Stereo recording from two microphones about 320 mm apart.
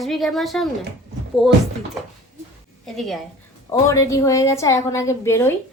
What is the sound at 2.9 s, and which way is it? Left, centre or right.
A woman's voice, centre.